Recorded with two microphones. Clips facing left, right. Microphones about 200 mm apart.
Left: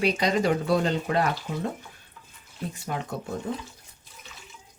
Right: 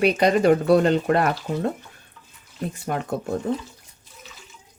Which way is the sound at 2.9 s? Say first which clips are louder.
Right 5 dB; 55° right (ahead or behind).